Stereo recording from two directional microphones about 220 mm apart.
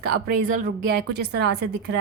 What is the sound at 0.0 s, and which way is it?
A woman's voice, 45° right (ahead or behind).